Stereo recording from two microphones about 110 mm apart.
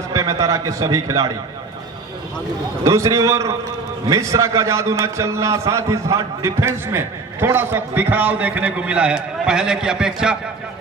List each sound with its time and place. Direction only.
0.1 s a man's voice: 30° right (ahead or behind)
2.8 s a man's voice: 25° right (ahead or behind); by 10.3 s 5° right (ahead or behind)